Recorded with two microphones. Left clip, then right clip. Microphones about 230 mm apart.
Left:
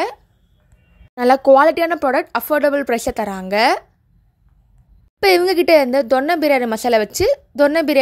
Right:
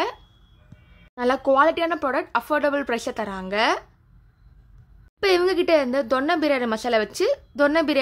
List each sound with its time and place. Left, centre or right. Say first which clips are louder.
1.1 s speech: left 8 dB; left
5.2 s speech: left 6 dB; left